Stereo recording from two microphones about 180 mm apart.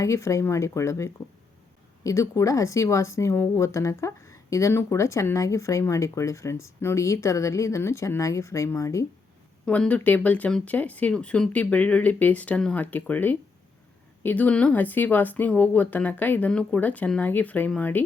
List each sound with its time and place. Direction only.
0.0 s speech: 15° left (ahead or behind)
9.6 s speech: 5° left (ahead or behind)